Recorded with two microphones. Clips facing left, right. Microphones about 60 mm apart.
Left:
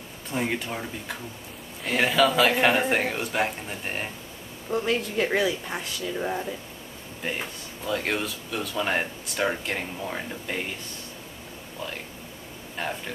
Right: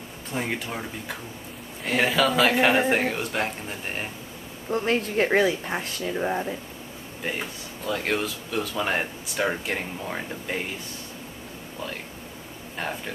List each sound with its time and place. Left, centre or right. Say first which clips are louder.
0.3 s speech: left 1 dB; centre
4.8 s speech: right 4 dB; right
6.1 s speech: right 3 dB; centre
7.2 s speech: right 1 dB; centre
12.7 s speech: even; centre